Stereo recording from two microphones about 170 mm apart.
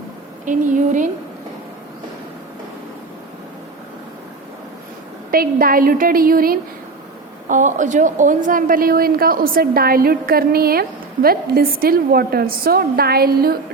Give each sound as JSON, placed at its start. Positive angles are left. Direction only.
{"t": 0.4, "sound": "a woman's voice", "side_deg": -50}
{"t": 5.3, "sound": "a woman's voice", "side_deg": -60}